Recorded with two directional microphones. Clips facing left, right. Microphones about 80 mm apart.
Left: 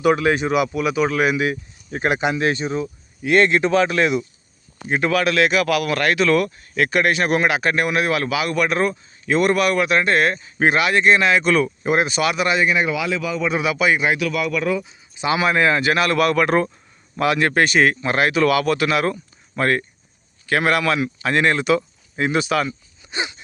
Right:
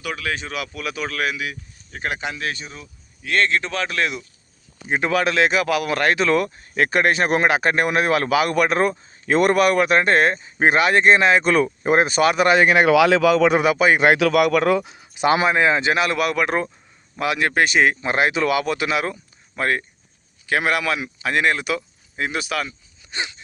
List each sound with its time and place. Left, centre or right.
0.0 s speech: left
1.4 s speech: left
2.0 s speech: centre
3.2 s speech: centre
4.9 s speech: right
13.6 s speech: right
14.0 s speech: right
15.4 s speech: right
19.0 s speech: centre